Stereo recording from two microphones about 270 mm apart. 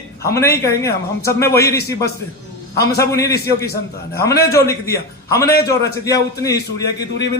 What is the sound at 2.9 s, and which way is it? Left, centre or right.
A man's voice, centre.